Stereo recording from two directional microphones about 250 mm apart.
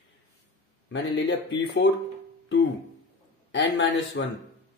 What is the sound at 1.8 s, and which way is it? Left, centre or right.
Speech, left.